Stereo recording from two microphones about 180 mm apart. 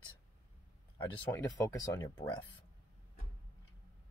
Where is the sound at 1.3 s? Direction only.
15° left (ahead or behind).